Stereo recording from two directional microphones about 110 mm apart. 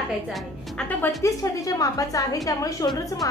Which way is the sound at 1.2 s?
30° left (ahead or behind).